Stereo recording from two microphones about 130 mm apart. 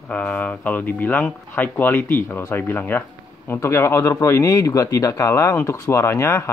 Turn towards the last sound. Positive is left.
turn(degrees=20)  # may be behind; listen again after turning